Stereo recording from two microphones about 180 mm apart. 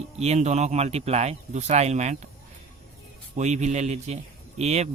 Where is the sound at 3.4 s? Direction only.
40° right (ahead or behind).